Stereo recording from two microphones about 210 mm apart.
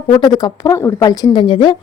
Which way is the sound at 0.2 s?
20° left (ahead or behind).